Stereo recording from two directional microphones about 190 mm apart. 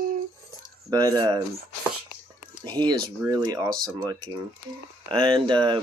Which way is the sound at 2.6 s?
20° right (ahead or behind).